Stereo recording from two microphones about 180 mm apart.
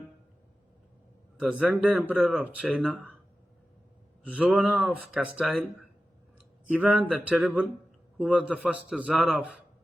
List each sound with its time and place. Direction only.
1.4 s speech: 5° right (ahead or behind)
4.3 s speech: 5° right (ahead or behind)
6.7 s a man's voice: 10° right (ahead or behind)